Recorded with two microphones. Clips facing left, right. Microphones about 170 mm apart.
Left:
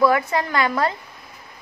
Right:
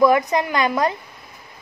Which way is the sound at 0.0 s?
15° right (ahead or behind).